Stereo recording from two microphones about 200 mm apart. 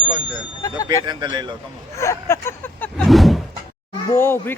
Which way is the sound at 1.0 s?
20° right (ahead or behind).